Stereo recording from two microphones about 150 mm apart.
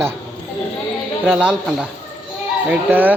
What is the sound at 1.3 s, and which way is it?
A woman's voice, 5° right (ahead or behind).